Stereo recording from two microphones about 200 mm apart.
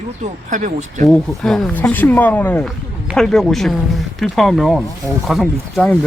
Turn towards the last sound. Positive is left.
turn(degrees=0)  # may be behind; listen again after turning